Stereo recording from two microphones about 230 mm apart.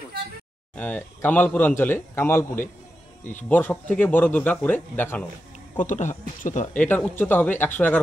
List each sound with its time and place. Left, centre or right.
0.7 s a man's voice: centre
5.8 s speech: left
6.7 s a man's voice: centre